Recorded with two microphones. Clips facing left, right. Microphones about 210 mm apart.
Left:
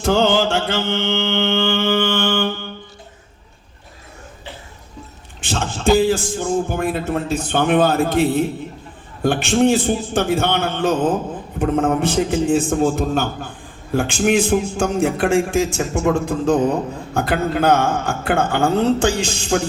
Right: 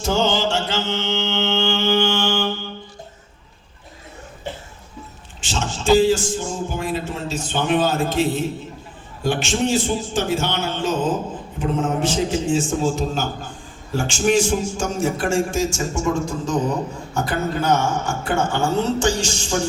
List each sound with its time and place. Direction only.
0.0 s mantra: 60° left (ahead or behind)
5.4 s speech: 55° left (ahead or behind)